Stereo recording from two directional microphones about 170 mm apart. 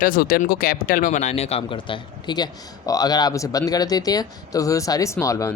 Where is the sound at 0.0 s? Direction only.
60° left (ahead or behind).